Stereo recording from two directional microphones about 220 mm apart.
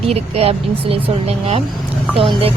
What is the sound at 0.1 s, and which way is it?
Speech, 25° right (ahead or behind).